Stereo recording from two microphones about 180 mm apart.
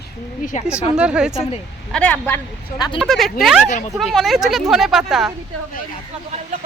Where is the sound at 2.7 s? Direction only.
25° left (ahead or behind).